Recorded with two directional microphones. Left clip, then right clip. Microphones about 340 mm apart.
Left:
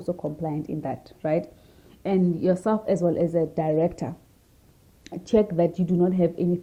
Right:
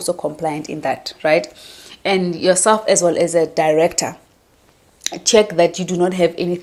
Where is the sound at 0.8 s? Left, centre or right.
Centre.